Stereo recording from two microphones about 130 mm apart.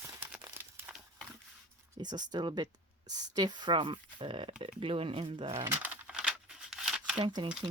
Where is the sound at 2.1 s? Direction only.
35° right (ahead or behind).